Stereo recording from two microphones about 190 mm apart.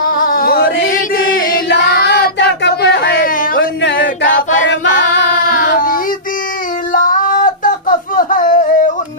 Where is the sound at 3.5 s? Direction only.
70° left (ahead or behind).